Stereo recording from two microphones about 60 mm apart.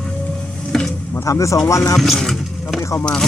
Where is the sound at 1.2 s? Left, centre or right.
Left.